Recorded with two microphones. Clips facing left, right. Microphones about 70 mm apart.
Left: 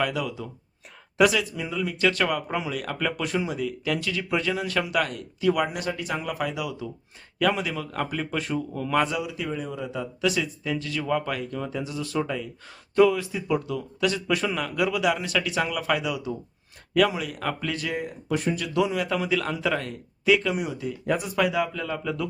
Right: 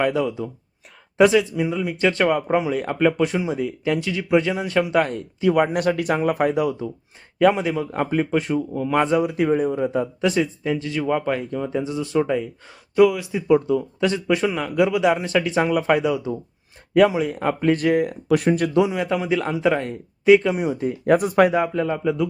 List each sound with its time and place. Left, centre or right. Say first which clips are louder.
0.0 s speech: right 6 dB; right
5.7 s speech: right 9 dB; right
6.1 s speech: right 9 dB; right
7.3 s speech: right 7 dB; right
9.0 s speech: right 6 dB; right
9.2 s speech: right 11 dB; right
13.0 s speech: right 3 dB; centre
13.2 s speech: right 9 dB; right
17.8 s speech: right 11 dB; right
18.9 s speech: right 3 dB; centre; by 20.9 s right
21.1 s speech: right 9 dB; right; by 22.3 s centre